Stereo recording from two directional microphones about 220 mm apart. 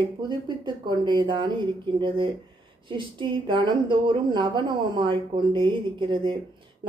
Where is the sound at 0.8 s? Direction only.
20° right (ahead or behind).